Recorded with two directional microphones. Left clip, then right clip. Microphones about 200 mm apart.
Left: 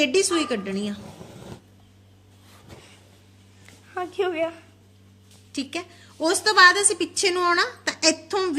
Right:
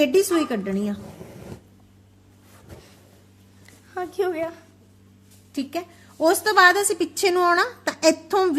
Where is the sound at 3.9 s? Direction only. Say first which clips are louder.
Right 1 dB; 5° right (ahead or behind).